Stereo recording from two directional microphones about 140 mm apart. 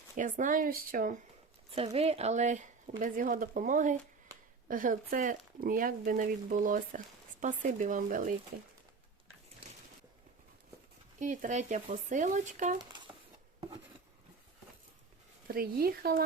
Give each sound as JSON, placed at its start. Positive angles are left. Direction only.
{"t": 0.2, "sound": "speech", "side_deg": -65}
{"t": 1.7, "sound": "speech", "side_deg": -45}
{"t": 3.0, "sound": "speech", "side_deg": -70}
{"t": 5.5, "sound": "speech", "side_deg": -85}
{"t": 11.2, "sound": "speech", "side_deg": -65}
{"t": 12.8, "sound": "a sound", "side_deg": -35}
{"t": 15.4, "sound": "speech", "side_deg": -90}